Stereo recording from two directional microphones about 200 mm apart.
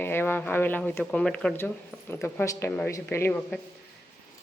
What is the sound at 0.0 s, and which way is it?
Speech, 10° left (ahead or behind).